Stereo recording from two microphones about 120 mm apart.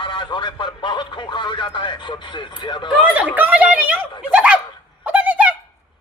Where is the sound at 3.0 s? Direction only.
10° right (ahead or behind).